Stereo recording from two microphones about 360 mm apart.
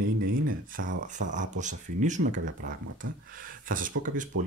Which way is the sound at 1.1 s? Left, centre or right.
Right.